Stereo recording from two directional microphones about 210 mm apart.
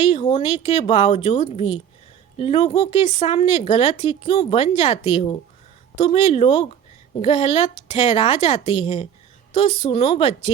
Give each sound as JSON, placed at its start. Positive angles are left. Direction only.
{"t": 0.0, "sound": "speech", "side_deg": 25}